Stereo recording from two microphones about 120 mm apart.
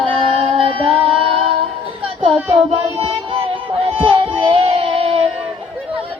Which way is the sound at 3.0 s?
50° right (ahead or behind).